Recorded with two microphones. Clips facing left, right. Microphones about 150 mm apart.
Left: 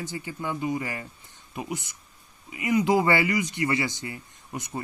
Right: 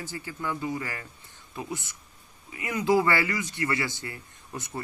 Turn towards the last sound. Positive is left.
turn(degrees=15)  # may be behind; listen again after turning